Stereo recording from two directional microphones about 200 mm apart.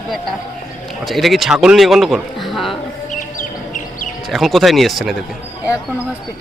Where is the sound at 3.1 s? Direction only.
40° left (ahead or behind).